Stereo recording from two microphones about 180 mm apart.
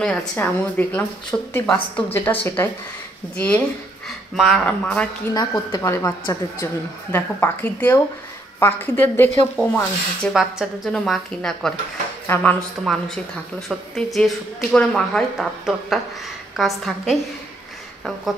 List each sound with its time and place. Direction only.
0.4 s a woman's voice: 10° left (ahead or behind)
5.3 s a woman's voice: 20° left (ahead or behind); by 17.2 s centre (ahead or behind)